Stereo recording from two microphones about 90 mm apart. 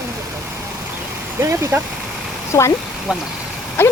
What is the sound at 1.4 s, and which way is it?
Speech, 35° right (ahead or behind).